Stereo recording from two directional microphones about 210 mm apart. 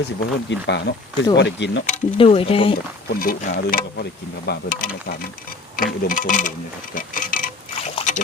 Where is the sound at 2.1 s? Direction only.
25° left (ahead or behind).